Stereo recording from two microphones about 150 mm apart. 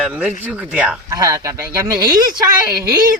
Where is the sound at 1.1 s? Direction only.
25° right (ahead or behind).